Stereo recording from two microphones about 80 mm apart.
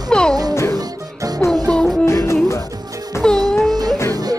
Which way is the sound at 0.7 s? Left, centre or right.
Right.